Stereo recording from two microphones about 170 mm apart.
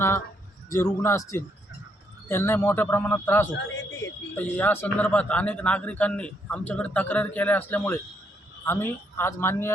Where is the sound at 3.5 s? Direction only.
90° left.